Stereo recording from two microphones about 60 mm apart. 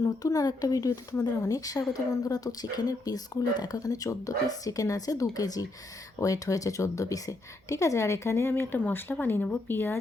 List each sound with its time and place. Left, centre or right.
0.0 s speech: left
1.2 s speech: left
6.1 s speech: left